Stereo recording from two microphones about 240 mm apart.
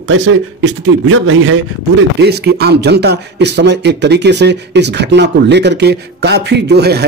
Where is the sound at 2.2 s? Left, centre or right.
Right.